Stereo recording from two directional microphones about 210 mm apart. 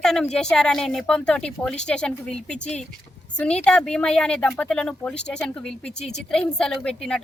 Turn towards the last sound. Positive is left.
turn(degrees=5)  # may be behind; listen again after turning